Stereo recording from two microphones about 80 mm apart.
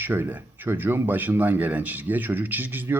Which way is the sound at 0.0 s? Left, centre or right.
Right.